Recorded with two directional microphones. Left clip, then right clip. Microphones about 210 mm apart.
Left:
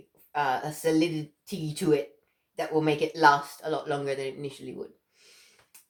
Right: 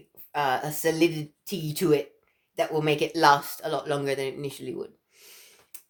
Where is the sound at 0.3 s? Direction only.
55° right (ahead or behind).